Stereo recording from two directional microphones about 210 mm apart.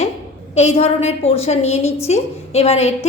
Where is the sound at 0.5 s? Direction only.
30° left (ahead or behind).